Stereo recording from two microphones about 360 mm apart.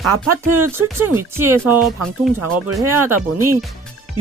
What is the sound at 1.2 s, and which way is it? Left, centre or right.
Speech, centre.